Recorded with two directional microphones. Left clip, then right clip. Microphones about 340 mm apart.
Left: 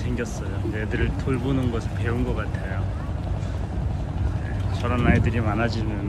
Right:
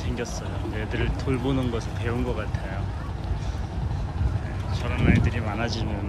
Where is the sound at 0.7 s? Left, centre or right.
Centre.